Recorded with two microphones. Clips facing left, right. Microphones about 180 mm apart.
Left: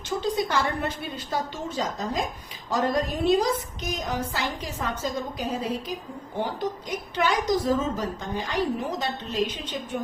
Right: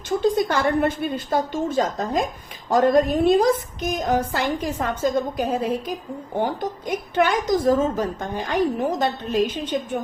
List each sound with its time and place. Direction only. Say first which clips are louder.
0.2 s a woman's voice: right 5 dB; 50° right (ahead or behind)